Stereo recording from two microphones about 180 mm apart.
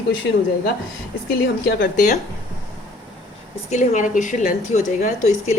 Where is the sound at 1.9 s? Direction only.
45° left (ahead or behind).